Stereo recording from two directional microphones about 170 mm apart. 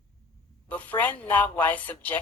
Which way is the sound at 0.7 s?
10° left (ahead or behind).